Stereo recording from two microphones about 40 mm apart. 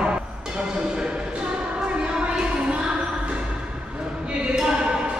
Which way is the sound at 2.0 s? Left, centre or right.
Right.